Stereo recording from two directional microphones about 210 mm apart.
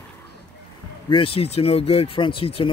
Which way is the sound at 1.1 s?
25° left (ahead or behind).